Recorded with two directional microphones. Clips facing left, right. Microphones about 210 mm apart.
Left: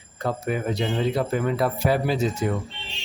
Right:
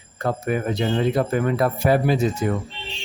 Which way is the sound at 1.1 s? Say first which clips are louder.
Right 3 dB; 50° right (ahead or behind).